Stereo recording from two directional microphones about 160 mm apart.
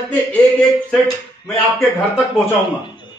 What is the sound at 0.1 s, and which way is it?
Speech, 10° left (ahead or behind).